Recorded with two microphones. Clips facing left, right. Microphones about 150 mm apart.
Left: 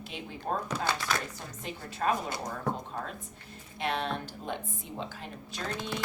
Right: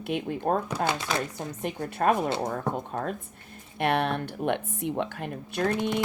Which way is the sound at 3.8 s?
60° right (ahead or behind).